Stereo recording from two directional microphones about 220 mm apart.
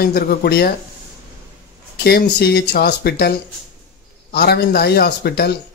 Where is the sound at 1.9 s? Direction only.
50° left (ahead or behind).